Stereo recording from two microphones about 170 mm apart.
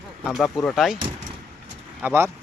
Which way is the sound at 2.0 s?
15° right (ahead or behind).